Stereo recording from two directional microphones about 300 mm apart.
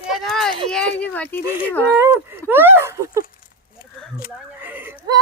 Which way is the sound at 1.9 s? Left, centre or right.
Centre.